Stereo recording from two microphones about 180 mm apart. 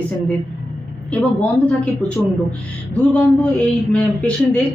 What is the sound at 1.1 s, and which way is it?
Speech, 5° left (ahead or behind).